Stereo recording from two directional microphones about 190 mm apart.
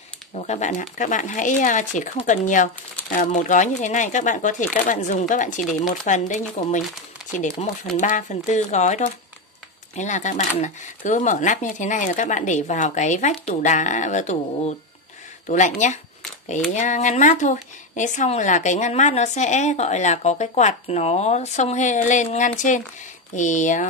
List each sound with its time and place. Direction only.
0.3 s speech: 35° left (ahead or behind)